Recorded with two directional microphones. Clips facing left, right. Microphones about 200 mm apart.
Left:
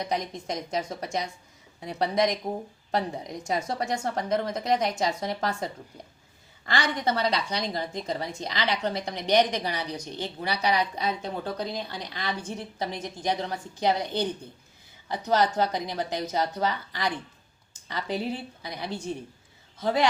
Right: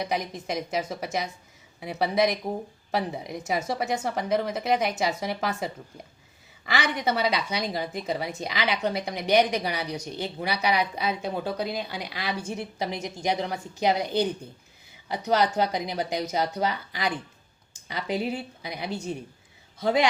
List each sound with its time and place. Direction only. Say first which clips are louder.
0.0 s a woman's voice: right 1 dB; 5° right (ahead or behind)